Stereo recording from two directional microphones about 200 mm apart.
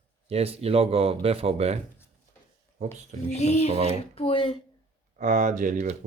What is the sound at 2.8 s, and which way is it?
Speech, 35° right (ahead or behind).